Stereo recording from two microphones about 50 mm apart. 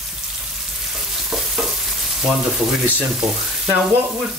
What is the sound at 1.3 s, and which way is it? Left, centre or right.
Stir, centre.